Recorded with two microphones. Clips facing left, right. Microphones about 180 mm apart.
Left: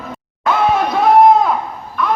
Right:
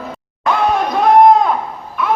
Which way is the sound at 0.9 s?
5° left (ahead or behind).